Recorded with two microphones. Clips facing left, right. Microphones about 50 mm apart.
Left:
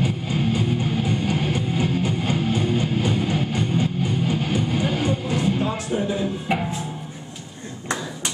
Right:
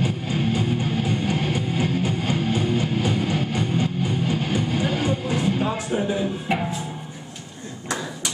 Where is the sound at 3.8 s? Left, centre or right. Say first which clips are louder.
Left 1 dB; centre.